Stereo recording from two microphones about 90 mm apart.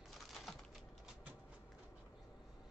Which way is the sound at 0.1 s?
Centre (ahead or behind).